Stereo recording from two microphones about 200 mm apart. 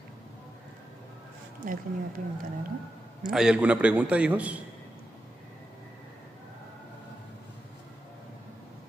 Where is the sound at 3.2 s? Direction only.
5° right (ahead or behind).